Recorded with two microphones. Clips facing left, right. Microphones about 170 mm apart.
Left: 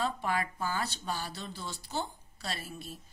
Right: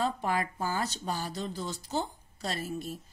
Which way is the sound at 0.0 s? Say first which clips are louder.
Right 2 dB; 40° right (ahead or behind).